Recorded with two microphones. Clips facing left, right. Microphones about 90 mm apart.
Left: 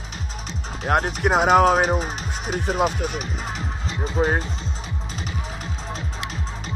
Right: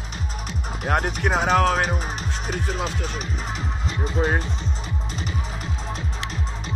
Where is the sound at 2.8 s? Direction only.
15° left (ahead or behind).